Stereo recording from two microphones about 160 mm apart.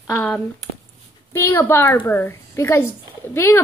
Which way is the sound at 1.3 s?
15° left (ahead or behind).